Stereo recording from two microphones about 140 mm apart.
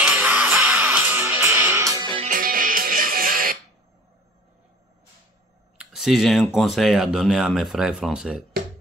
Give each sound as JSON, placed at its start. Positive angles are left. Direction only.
{"t": 0.2, "sound": "music", "side_deg": -10}
{"t": 2.2, "sound": "music", "side_deg": -85}
{"t": 5.8, "sound": "speech", "side_deg": 0}